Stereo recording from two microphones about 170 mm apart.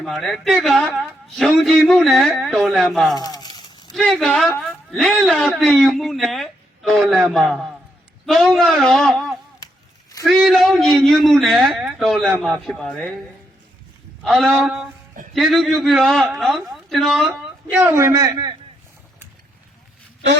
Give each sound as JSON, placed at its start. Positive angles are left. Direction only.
{"t": 0.0, "sound": "a man's voice", "side_deg": 0}
{"t": 3.2, "sound": "a sound", "side_deg": 25}
{"t": 3.9, "sound": "a man's voice", "side_deg": 0}
{"t": 10.2, "sound": "a man's voice", "side_deg": 0}
{"t": 14.3, "sound": "a man's voice", "side_deg": 0}